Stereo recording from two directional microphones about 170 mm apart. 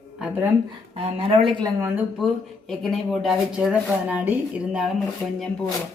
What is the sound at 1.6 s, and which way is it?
Speech, 15° right (ahead or behind).